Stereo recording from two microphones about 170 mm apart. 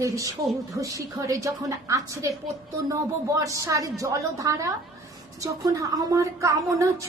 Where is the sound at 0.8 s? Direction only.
20° right (ahead or behind).